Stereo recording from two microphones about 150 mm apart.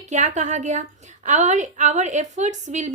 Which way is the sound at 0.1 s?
55° right (ahead or behind).